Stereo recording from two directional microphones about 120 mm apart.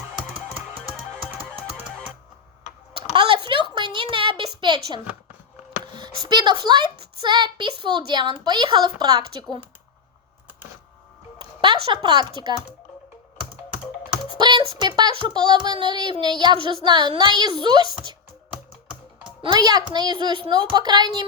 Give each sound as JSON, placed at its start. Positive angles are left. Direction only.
{"t": 1.5, "sound": "music", "side_deg": 10}
{"t": 2.9, "sound": "a sound", "side_deg": -45}
{"t": 6.0, "sound": "a woman's voice", "side_deg": -40}
{"t": 11.3, "sound": "a sound", "side_deg": -40}
{"t": 12.0, "sound": "a woman's voice", "side_deg": -40}
{"t": 14.3, "sound": "a woman's voice", "side_deg": -40}
{"t": 19.4, "sound": "a woman's voice", "side_deg": -40}